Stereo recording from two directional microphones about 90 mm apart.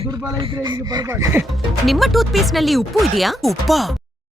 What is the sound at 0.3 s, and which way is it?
Speech, 65° right (ahead or behind).